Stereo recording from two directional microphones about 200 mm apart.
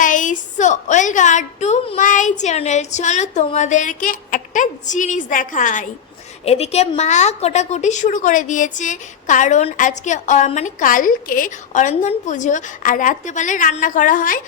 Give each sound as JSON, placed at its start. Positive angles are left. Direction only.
{"t": 0.0, "sound": "a woman's voice", "side_deg": 40}